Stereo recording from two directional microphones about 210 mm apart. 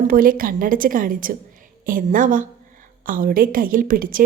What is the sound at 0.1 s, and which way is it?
A woman's voice, 40° right (ahead or behind).